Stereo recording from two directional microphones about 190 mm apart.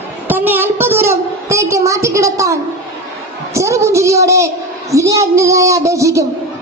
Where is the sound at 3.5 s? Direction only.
15° right (ahead or behind).